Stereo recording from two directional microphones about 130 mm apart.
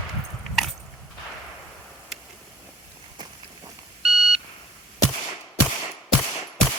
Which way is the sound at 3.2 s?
30° right (ahead or behind).